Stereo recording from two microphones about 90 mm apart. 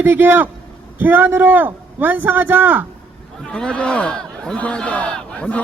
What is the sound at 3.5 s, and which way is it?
Speech, 10° left (ahead or behind).